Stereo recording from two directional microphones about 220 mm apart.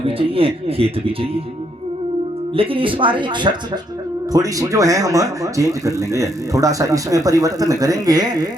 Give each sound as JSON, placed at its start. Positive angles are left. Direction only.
{"t": 0.0, "sound": "speech", "side_deg": -25}
{"t": 2.6, "sound": "speech", "side_deg": -25}